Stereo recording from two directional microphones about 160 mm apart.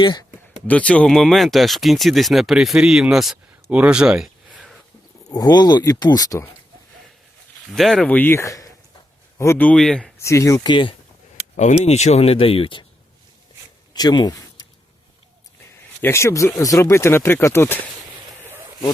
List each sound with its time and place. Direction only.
0.0 s speech: 25° left (ahead or behind)
0.7 s speech: 10° left (ahead or behind)
5.3 s speech: 25° left (ahead or behind)
7.7 s speech: centre (ahead or behind)
10.2 s speech: 20° left (ahead or behind)
11.3 s speech: 45° left (ahead or behind)
13.9 s speech: 25° left (ahead or behind)
16.0 s speech: 15° left (ahead or behind)
18.4 s a sound: 15° right (ahead or behind)